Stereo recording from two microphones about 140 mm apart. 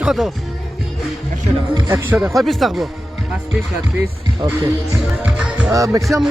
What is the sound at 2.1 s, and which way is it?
Speech, centre (ahead or behind).